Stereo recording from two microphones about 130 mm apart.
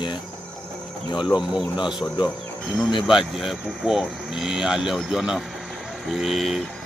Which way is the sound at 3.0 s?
Centre (ahead or behind).